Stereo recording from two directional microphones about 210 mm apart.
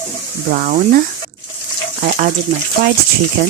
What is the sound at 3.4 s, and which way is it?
Speech, 50° right (ahead or behind).